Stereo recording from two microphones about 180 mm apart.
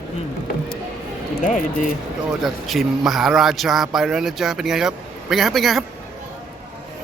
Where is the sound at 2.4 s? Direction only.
Centre (ahead or behind).